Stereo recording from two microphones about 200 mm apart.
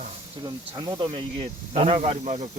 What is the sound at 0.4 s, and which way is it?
Speech, 20° right (ahead or behind).